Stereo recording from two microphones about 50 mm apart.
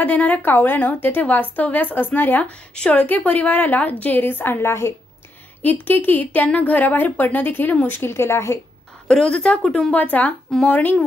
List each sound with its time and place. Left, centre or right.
0.0 s a woman's voice: left
2.4 s a woman's voice: left
3.0 s a woman's voice: left
5.6 s a woman's voice: left
9.0 s a woman's voice: centre
10.1 s a woman's voice: left